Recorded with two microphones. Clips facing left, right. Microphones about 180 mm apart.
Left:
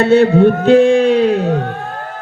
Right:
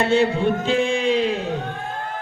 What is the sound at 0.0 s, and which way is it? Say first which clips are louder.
Music: left 9 dB; 65° left (ahead or behind).